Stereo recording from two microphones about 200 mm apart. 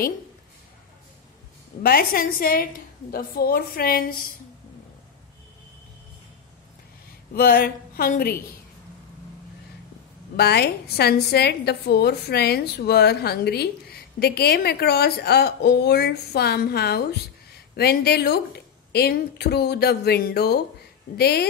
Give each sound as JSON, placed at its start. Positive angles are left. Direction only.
{"t": 1.8, "sound": "a woman's voice", "side_deg": 50}
{"t": 7.3, "sound": "a woman's voice", "side_deg": 50}
{"t": 10.3, "sound": "a woman's voice", "side_deg": 55}